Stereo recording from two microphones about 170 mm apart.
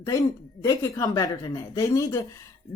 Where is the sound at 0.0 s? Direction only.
20° left (ahead or behind).